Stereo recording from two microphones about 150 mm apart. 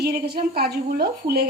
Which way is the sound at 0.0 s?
90° right.